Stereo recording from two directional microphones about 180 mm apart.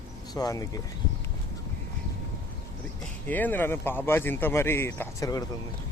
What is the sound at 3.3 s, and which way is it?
Speech, 10° left (ahead or behind).